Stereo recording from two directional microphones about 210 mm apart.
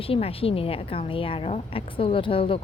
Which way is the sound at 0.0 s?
25° left (ahead or behind).